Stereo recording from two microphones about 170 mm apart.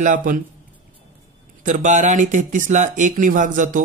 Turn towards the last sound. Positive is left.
turn(degrees=-50)  # may be behind; listen again after turning